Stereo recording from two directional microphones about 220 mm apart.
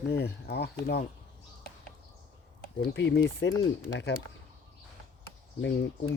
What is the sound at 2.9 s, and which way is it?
Speech, 55° left (ahead or behind).